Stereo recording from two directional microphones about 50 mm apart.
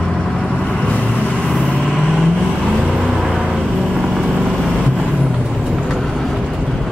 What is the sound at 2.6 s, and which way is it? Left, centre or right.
Vehicle, centre.